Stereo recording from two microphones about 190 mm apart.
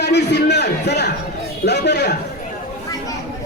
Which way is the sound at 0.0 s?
65° left (ahead or behind).